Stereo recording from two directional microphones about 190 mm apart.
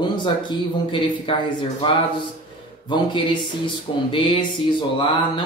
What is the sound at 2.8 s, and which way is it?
Speech, 25° left (ahead or behind).